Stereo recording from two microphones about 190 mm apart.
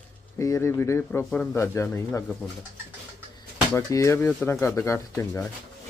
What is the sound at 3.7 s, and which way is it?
Speech, 15° left (ahead or behind).